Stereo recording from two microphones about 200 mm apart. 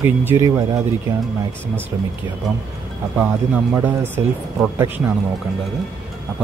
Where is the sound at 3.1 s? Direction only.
10° right (ahead or behind).